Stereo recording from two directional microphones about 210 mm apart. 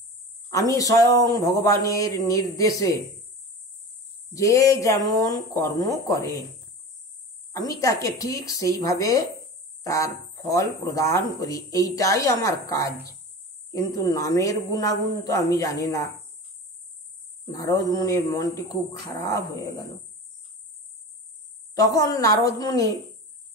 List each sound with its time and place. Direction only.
0.5 s a man's voice: 15° left (ahead or behind)
4.3 s a man's voice: 15° left (ahead or behind)
7.8 s a man's voice: 15° left (ahead or behind)
14.1 s a man's voice: 15° left (ahead or behind)
17.5 s a man's voice: 15° left (ahead or behind)
21.7 s a man's voice: 15° left (ahead or behind)